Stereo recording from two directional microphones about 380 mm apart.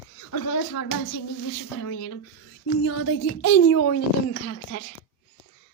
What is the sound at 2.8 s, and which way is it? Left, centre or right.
A woman's voice, left.